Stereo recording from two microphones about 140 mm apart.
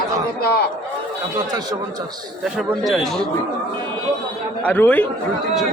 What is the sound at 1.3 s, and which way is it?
Speech, 30° right (ahead or behind).